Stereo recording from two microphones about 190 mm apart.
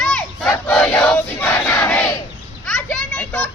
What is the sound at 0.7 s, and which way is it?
Crowd, 5° left (ahead or behind).